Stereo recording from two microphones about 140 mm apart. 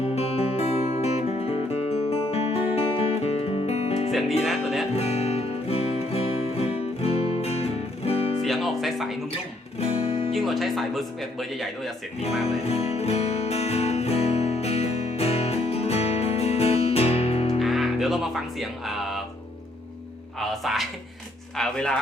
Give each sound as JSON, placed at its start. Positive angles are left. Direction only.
{"t": 0.0, "sound": "music", "side_deg": 45}
{"t": 4.1, "sound": "music", "side_deg": 0}
{"t": 4.9, "sound": "music", "side_deg": 45}
{"t": 8.4, "sound": "music", "side_deg": 0}
{"t": 9.8, "sound": "music", "side_deg": 45}
{"t": 10.3, "sound": "speech", "side_deg": 0}
{"t": 12.6, "sound": "music", "side_deg": 45}
{"t": 17.6, "sound": "music", "side_deg": 0}
{"t": 20.4, "sound": "music", "side_deg": 0}
{"t": 21.5, "sound": "a sound", "side_deg": 5}